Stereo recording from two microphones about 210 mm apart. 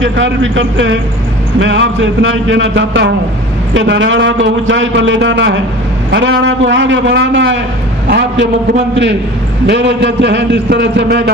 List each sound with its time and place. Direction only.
0.0 s a man's voice: 60° right (ahead or behind)
9.6 s a man's voice: 55° right (ahead or behind)